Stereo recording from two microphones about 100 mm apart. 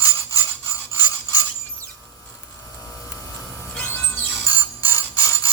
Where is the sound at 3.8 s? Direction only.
15° left (ahead or behind).